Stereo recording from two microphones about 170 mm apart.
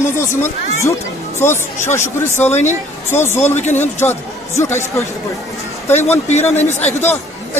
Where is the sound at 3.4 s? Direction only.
40° left (ahead or behind).